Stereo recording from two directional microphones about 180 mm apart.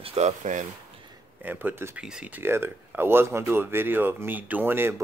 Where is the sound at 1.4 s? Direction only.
10° right (ahead or behind).